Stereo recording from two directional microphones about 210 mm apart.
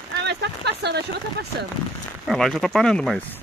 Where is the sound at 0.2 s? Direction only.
50° right (ahead or behind).